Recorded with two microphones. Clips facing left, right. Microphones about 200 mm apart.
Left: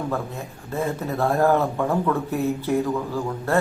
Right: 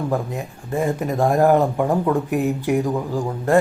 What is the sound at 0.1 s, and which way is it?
Speech, 15° right (ahead or behind).